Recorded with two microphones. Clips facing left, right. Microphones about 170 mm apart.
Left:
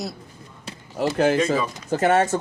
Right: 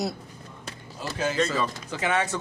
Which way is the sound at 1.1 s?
60° left (ahead or behind).